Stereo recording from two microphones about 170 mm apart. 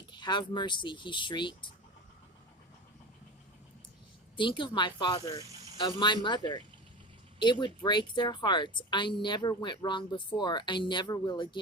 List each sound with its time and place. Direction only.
0.1 s speech: 25° left (ahead or behind)
4.4 s speech: 30° left (ahead or behind)